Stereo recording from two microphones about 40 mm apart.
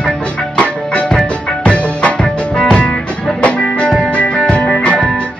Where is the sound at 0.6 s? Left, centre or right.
Left.